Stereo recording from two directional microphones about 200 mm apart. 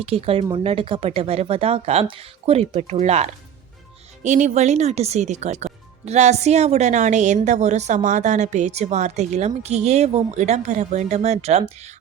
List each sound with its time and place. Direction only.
0.0 s a woman's voice: 30° right (ahead or behind)